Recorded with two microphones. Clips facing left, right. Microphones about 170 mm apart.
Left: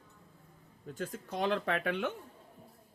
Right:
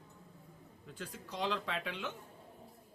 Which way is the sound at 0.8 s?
45° left (ahead or behind).